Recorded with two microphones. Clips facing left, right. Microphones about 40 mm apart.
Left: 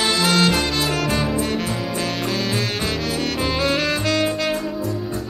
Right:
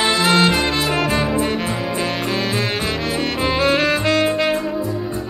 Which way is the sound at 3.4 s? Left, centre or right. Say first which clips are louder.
Right 5 dB; centre.